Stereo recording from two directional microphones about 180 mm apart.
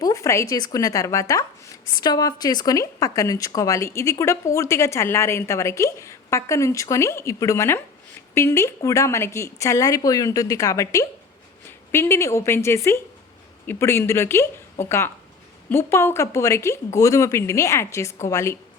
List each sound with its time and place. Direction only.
0.0 s speech: 15° left (ahead or behind)